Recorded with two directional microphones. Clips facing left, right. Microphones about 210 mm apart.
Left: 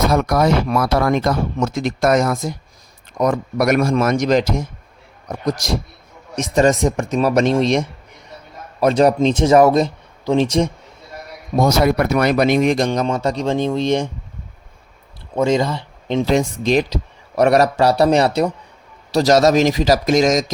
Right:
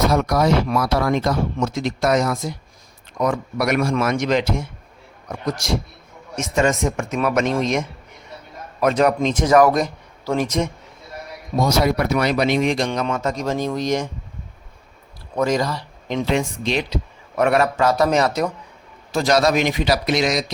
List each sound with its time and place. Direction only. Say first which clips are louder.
0.1 s a man's voice: left 2 dB; 55° left (ahead or behind); by 10.7 s 30° left (ahead or behind)
11.5 s speech: left 3 dB; 55° left (ahead or behind); by 14.1 s 30° left (ahead or behind)
15.4 s speech: left 3 dB; 25° left (ahead or behind)
16.3 s a man's voice: left 6 dB; 40° left (ahead or behind)